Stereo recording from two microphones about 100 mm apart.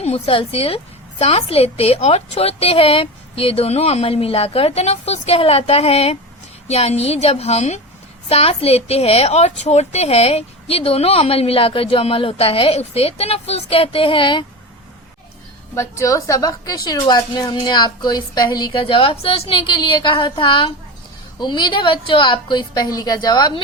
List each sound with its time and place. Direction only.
0.0 s a woman's voice: 80° left
1.2 s a woman's voice: 90° left; by 14.4 s 60° left (ahead or behind)
15.7 s a woman's voice: 30° left (ahead or behind); by 20.7 s 60° left (ahead or behind)
21.3 s a woman's voice: 45° left (ahead or behind)